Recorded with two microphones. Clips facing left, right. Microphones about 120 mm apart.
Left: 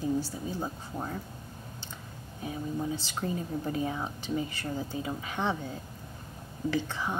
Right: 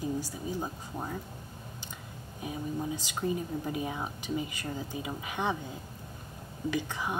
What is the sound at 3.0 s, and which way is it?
A woman's voice, 15° right (ahead or behind).